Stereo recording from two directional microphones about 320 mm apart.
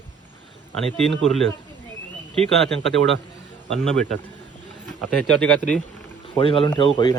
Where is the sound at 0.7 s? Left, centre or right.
Centre.